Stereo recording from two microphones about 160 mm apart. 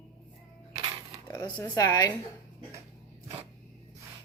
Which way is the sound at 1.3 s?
20° left (ahead or behind).